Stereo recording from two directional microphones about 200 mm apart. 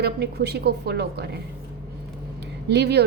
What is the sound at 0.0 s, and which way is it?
A woman's voice, 55° right (ahead or behind).